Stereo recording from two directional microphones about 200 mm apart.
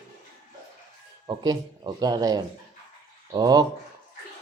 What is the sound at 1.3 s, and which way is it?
Speech, 20° right (ahead or behind).